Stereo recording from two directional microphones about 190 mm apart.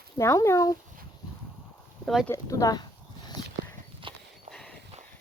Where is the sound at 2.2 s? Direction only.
15° left (ahead or behind).